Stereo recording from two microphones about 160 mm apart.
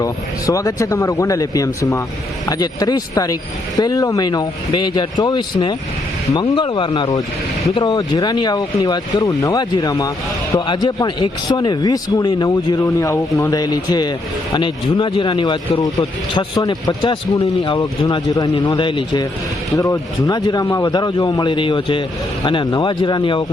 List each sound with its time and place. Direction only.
0.0 s speech: 20° left (ahead or behind)
20.7 s a man's voice: 15° left (ahead or behind)
20.9 s speech: 25° left (ahead or behind)